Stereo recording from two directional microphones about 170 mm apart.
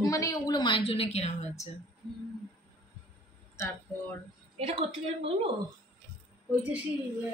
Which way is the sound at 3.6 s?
15° left (ahead or behind).